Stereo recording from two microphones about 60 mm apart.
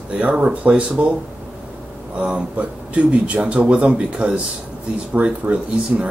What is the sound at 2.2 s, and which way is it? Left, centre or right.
Speech, centre.